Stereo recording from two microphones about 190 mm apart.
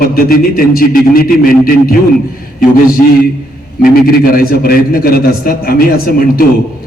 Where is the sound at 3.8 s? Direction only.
50° left (ahead or behind).